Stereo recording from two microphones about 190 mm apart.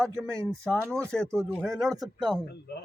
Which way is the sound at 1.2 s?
15° right (ahead or behind).